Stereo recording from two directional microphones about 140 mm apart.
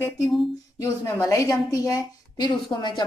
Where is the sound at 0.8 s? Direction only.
20° left (ahead or behind).